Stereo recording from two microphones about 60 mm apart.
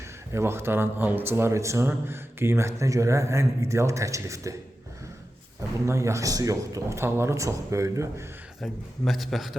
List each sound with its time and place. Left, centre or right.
0.3 s speech: right
1.9 s a man's voice: right
5.8 s a man's voice: right
6.9 s speech: right
7.3 s a man's voice: right
8.6 s a man's voice: centre